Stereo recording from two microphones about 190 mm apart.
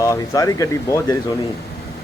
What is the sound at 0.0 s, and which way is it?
Speech, 15° left (ahead or behind).